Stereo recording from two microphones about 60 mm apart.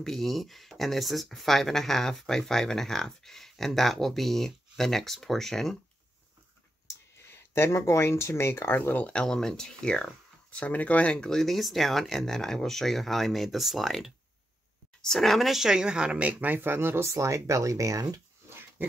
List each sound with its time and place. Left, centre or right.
0.0 s speech: centre
7.2 s speech: left
8.9 s speech: centre
11.2 s speech: centre; by 18.2 s right
18.5 s pig: right